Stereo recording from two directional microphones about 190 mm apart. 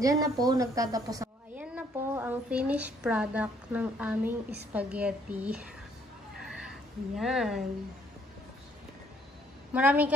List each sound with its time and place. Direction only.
0.0 s a woman's voice: 20° right (ahead or behind)
6.4 s a sound: centre (ahead or behind)
9.7 s a woman's voice: 10° right (ahead or behind)